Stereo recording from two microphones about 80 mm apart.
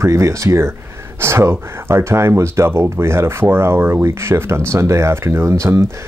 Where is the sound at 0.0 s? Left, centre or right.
Right.